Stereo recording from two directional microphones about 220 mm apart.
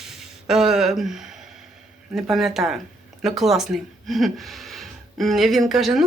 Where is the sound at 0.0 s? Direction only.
Centre (ahead or behind).